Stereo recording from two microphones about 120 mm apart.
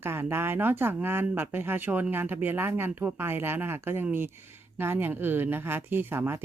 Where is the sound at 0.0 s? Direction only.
20° right (ahead or behind).